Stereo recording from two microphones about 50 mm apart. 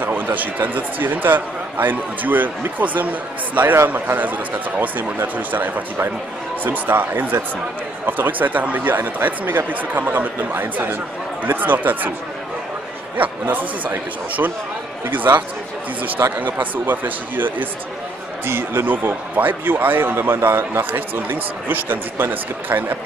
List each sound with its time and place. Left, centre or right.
0.0 s a man's voice: right
13.2 s a man's voice: right
18.4 s a man's voice: right